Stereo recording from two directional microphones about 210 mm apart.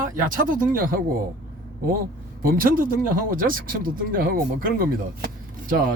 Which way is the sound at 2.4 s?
45° right (ahead or behind).